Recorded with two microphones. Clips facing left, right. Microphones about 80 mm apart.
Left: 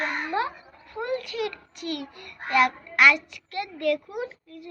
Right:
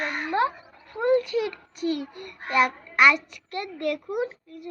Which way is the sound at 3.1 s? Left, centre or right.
Right.